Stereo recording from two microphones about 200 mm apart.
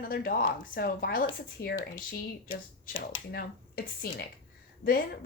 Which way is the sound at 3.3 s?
45° left (ahead or behind).